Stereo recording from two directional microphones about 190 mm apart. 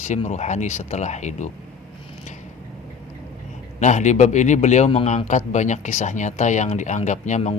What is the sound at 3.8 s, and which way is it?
A man's voice, 40° left (ahead or behind).